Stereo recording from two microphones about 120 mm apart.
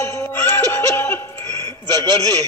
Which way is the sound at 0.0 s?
20° left (ahead or behind).